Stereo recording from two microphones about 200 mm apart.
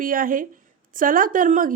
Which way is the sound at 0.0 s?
45° right (ahead or behind).